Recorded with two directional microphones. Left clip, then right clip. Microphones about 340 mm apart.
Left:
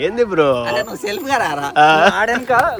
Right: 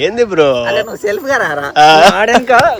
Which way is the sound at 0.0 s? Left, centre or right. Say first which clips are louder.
Right 4 dB; centre.